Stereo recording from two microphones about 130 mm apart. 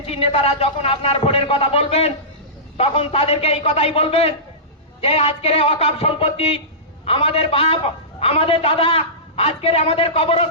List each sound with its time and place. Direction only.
0.0 s a man's voice: 50° left (ahead or behind)